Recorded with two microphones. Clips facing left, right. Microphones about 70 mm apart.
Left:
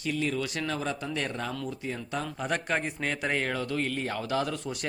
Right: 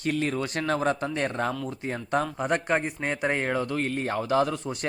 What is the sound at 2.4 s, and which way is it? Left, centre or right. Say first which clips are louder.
A man's voice: right 4 dB; right.